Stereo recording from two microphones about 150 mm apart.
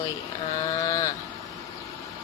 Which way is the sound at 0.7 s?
25° left (ahead or behind).